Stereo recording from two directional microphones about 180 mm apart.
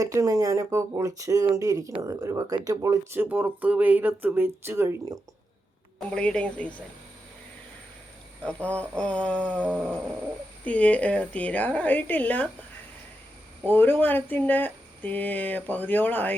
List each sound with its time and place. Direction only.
0.0 s speech: 15° right (ahead or behind)
6.1 s speech: 5° left (ahead or behind)
8.4 s speech: 5° left (ahead or behind)
9.6 s speech: 10° right (ahead or behind)
10.6 s speech: 5° left (ahead or behind)
13.7 s speech: 10° left (ahead or behind)